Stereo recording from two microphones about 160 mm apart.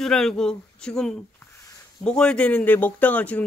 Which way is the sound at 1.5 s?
20° left (ahead or behind).